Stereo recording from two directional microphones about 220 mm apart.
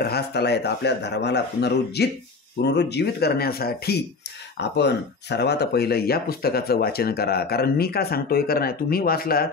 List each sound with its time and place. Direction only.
0.0 s speech: 45° left (ahead or behind)